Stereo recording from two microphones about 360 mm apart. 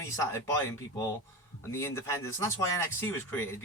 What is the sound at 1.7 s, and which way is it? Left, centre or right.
Speech, centre.